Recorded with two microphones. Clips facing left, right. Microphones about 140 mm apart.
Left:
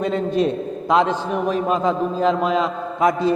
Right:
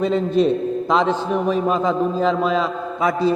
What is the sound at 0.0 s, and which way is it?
A man's voice, 5° left (ahead or behind).